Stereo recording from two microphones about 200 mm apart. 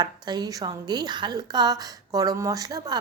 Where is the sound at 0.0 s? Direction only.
20° right (ahead or behind).